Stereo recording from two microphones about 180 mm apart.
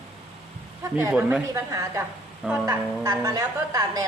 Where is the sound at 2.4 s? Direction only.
5° right (ahead or behind).